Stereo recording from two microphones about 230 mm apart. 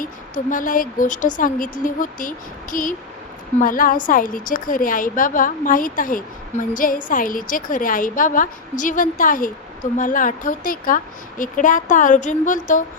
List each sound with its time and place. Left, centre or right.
0.0 s a woman's voice: left